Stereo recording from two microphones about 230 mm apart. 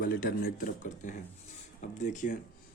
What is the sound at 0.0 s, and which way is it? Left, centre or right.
Speech, left.